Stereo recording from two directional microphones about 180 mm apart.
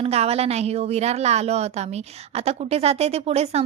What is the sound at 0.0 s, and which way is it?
A woman's voice, 35° right (ahead or behind).